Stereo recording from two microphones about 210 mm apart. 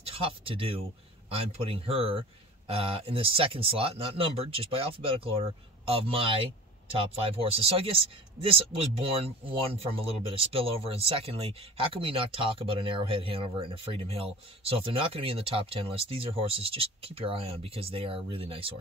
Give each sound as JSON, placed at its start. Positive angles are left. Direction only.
{"t": 0.0, "sound": "speech", "side_deg": -25}